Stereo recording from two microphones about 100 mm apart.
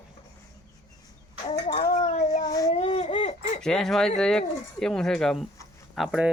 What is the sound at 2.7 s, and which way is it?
Baby cry, 80° left.